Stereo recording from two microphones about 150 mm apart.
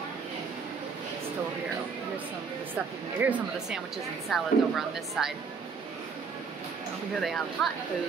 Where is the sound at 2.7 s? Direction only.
10° right (ahead or behind).